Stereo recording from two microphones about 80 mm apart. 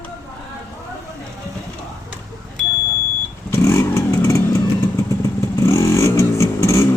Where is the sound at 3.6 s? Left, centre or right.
Left.